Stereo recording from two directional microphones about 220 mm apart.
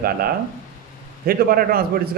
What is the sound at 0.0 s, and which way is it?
Speech, 45° right (ahead or behind).